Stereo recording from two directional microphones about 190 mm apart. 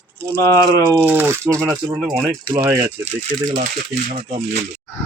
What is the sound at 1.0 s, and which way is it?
Speech, 10° right (ahead or behind).